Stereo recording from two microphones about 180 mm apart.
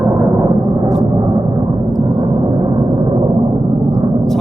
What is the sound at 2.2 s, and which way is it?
Gong, 20° right (ahead or behind).